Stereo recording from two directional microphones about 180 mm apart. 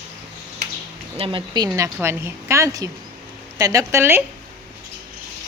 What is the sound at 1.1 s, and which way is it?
A woman's voice, 30° right (ahead or behind).